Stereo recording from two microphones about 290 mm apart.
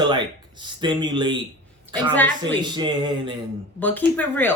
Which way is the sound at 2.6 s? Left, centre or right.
Centre.